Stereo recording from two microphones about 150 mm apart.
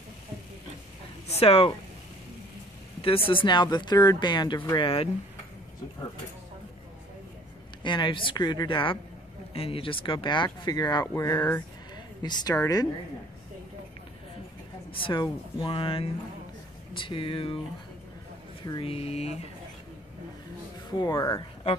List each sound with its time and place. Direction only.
1.3 s speech: 40° left (ahead or behind)
3.0 s speech: 40° left (ahead or behind)
7.8 s speech: 30° left (ahead or behind)
12.2 s a woman's voice: 30° left (ahead or behind)
14.9 s speech: 35° left (ahead or behind)
18.7 s speech: 40° left (ahead or behind)
21.0 s a woman's voice: 25° left (ahead or behind)